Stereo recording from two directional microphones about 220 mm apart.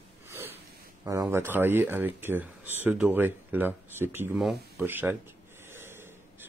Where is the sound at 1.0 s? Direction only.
15° right (ahead or behind).